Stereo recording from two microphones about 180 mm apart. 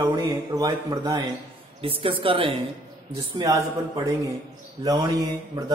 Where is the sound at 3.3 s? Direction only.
20° right (ahead or behind).